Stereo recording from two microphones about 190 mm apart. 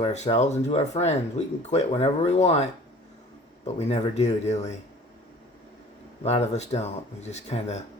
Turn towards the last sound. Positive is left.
turn(degrees=35)  # may be behind; listen again after turning